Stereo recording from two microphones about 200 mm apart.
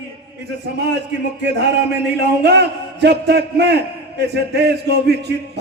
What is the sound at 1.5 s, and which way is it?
A man's voice, 55° right (ahead or behind).